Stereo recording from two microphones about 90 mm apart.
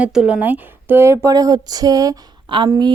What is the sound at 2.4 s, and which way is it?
Speech, 70° right (ahead or behind).